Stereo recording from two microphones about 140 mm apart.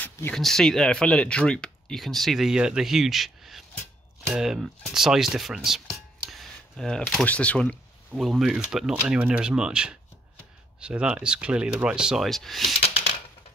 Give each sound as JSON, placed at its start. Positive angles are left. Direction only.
{"t": 0.0, "sound": "a sound", "side_deg": 10}
{"t": 0.4, "sound": "speech", "side_deg": 5}
{"t": 8.1, "sound": "speech", "side_deg": 0}
{"t": 12.8, "sound": "typewriter", "side_deg": 50}